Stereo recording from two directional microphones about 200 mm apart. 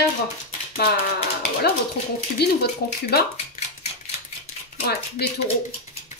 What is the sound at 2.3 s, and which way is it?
Speech, 55° left (ahead or behind).